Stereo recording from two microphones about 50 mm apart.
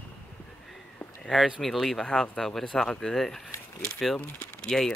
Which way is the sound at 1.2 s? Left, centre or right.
Centre.